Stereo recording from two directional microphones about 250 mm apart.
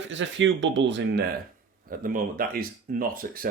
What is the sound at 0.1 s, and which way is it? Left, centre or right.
Speech, right.